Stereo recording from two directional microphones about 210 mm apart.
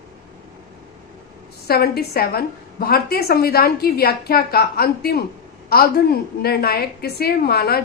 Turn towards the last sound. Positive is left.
turn(degrees=50)  # may be behind; listen again after turning